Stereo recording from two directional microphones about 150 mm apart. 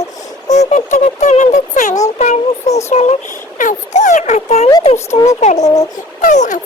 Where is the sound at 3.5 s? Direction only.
55° left (ahead or behind).